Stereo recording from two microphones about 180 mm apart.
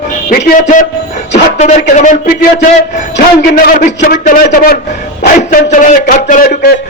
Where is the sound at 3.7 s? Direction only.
45° left (ahead or behind).